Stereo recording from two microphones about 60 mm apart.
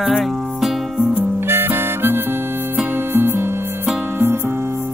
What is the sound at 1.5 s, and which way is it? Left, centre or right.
Harmonica, right.